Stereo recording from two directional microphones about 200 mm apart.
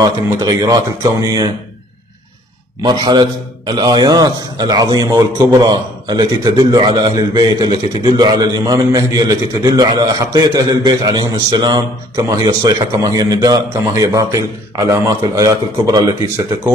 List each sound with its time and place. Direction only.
0.0 s a man's voice: 20° right (ahead or behind)
2.8 s a man's voice: 20° right (ahead or behind)